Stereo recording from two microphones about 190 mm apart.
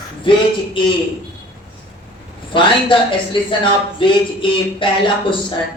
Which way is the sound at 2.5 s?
25° left (ahead or behind).